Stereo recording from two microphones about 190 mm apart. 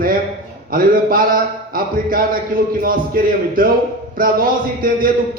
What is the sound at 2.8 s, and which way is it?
A man's voice, 50° right (ahead or behind).